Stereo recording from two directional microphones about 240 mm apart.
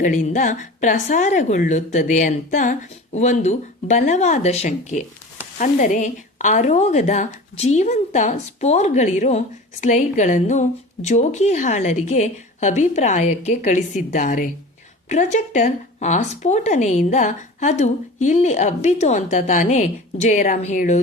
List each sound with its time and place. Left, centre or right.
0.0 s a woman's voice: left